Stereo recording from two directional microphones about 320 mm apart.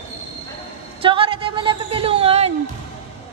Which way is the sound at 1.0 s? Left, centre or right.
Centre.